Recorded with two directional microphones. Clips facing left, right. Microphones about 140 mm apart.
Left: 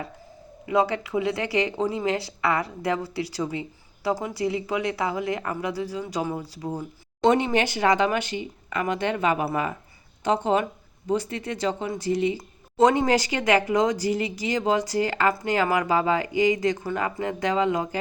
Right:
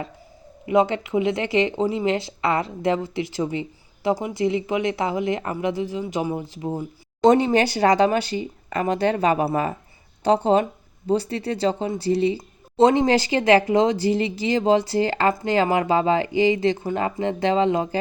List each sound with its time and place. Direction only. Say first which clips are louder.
0.6 s speech: right 4 dB; 20° right (ahead or behind)
7.2 s speech: right 4 dB; 35° right (ahead or behind)